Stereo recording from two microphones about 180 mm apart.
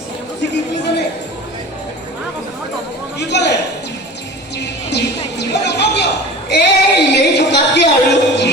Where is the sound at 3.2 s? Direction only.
70° left (ahead or behind).